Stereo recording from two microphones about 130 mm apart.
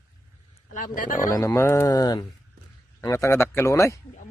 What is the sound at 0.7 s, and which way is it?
Speech, 90° left.